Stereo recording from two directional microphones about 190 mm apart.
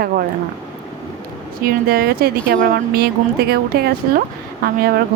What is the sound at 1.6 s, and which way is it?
A woman's voice, 55° right (ahead or behind).